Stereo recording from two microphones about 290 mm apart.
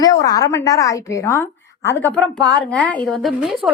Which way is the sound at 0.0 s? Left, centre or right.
Centre.